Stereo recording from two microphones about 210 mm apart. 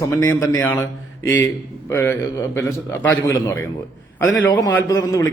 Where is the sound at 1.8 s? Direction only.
10° left (ahead or behind).